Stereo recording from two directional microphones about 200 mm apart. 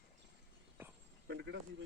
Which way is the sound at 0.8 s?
10° right (ahead or behind).